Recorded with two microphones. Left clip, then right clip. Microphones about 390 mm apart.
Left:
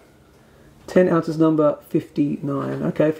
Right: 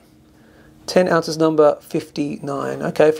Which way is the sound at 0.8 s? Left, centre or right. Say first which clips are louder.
Right 2 dB; right.